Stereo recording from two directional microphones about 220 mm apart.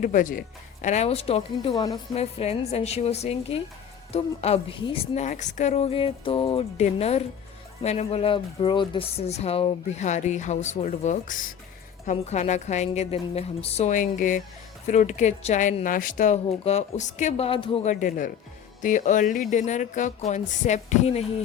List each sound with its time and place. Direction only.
0.0 s a woman's voice: 35° left (ahead or behind)
1.7 s speech: 15° left (ahead or behind)
2.1 s a woman's voice: 30° left (ahead or behind)